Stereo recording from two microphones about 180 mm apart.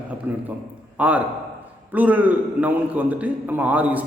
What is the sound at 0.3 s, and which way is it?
A man's voice, 10° right (ahead or behind).